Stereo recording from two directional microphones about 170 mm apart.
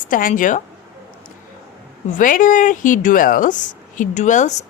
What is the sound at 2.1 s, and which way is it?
Speech, 50° left (ahead or behind).